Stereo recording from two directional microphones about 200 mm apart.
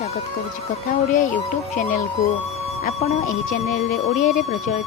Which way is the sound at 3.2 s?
45° left (ahead or behind).